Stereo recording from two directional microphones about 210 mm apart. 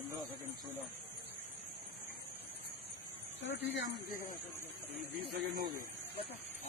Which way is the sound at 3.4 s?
55° left (ahead or behind).